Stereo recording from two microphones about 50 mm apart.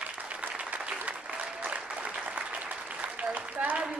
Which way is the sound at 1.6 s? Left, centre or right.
Right.